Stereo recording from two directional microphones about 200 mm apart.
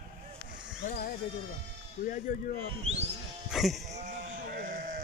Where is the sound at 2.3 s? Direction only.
40° left (ahead or behind).